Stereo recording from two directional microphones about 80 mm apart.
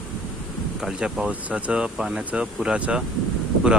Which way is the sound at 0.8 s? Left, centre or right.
Centre.